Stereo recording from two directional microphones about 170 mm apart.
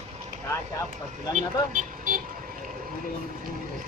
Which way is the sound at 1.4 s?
50° right (ahead or behind).